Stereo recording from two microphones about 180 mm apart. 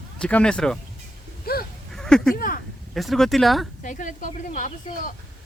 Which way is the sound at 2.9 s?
Centre (ahead or behind).